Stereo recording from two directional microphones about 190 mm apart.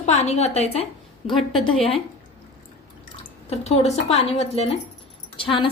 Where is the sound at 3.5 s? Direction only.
35° left (ahead or behind).